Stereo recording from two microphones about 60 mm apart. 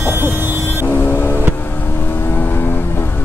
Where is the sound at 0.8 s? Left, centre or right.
Left.